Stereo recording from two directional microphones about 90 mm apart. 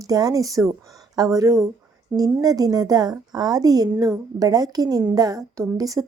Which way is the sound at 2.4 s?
45° right (ahead or behind).